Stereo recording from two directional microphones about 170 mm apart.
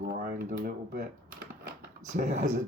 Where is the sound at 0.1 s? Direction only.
60° right (ahead or behind).